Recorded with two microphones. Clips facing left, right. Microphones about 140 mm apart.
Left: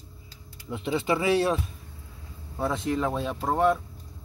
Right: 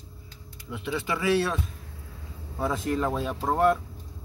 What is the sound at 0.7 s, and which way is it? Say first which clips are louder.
Speech: left 4 dB; 20° left (ahead or behind).